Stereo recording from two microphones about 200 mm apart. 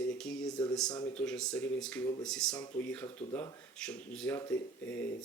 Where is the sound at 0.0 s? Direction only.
5° left (ahead or behind).